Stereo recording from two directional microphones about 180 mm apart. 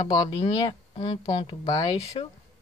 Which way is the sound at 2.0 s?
35° left (ahead or behind).